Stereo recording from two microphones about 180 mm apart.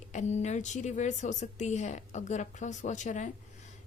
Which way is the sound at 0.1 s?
40° left (ahead or behind).